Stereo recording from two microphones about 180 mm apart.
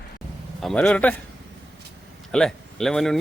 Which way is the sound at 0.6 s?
5° left (ahead or behind).